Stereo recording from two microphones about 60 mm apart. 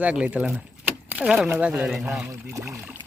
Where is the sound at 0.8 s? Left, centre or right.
Right.